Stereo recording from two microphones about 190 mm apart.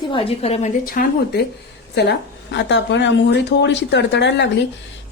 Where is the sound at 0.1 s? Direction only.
30° left (ahead or behind); by 1.4 s 50° left (ahead or behind).